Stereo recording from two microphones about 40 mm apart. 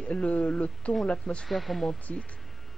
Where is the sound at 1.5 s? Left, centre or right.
Centre.